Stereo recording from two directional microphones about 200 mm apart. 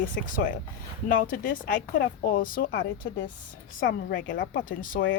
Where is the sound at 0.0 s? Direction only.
40° left (ahead or behind).